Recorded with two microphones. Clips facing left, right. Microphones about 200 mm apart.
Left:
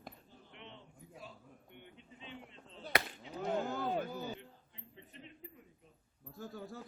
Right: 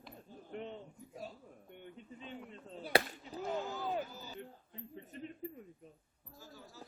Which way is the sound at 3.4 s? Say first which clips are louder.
Left 3 dB; 55° left (ahead or behind).